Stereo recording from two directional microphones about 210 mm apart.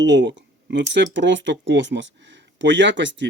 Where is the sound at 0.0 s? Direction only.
60° right (ahead or behind).